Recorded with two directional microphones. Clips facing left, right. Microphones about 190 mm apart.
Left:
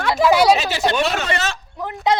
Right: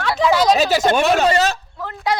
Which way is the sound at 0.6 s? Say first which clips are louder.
Right 4 dB; 40° right (ahead or behind).